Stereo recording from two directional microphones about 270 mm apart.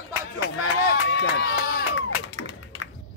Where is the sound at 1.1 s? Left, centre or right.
Left.